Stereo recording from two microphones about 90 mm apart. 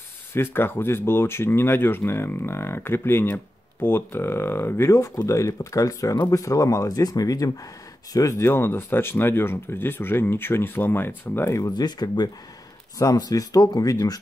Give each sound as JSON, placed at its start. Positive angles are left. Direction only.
{"t": 0.3, "sound": "speech", "side_deg": 25}
{"t": 11.7, "sound": "speech", "side_deg": 50}